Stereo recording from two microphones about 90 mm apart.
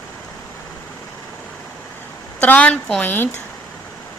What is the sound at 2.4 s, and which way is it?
Speech, 15° left (ahead or behind).